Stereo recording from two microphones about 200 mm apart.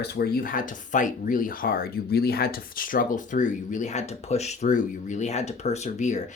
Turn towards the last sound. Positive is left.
turn(degrees=35)  # may be behind; listen again after turning